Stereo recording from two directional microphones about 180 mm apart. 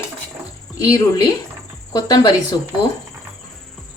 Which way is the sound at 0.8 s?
20° left (ahead or behind).